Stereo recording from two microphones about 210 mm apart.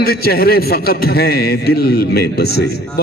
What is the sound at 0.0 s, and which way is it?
A man's voice, 45° left (ahead or behind).